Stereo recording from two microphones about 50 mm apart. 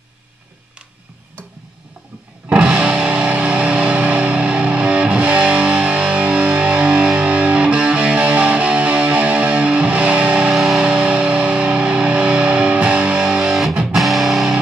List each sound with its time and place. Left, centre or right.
2.5 s music: right
10.5 s music: centre
10.8 s music: right
13.2 s music: centre